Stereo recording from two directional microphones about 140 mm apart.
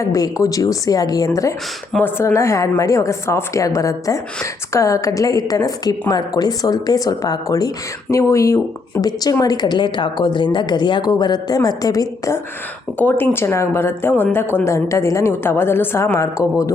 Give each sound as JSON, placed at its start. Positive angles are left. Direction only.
{"t": 0.0, "sound": "a woman's voice", "side_deg": 25}
{"t": 1.9, "sound": "a woman's voice", "side_deg": 15}